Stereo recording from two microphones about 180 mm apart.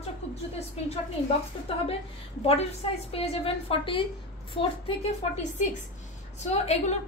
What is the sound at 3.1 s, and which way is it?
Speech, 30° left (ahead or behind).